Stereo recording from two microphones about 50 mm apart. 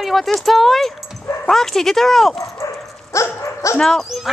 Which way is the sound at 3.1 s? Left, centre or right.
Left.